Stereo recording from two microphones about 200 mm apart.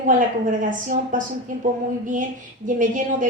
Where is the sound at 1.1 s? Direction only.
40° right (ahead or behind).